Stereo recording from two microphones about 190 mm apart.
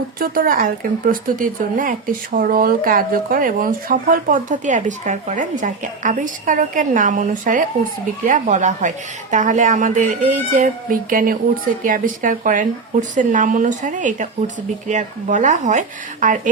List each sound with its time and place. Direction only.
0.2 s speech: 50° right (ahead or behind)